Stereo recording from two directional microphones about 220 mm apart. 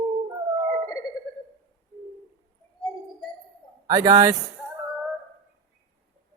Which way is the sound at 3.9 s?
15° right (ahead or behind).